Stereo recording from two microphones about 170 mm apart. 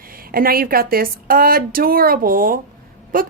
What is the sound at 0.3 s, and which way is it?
A woman's voice, 60° right (ahead or behind).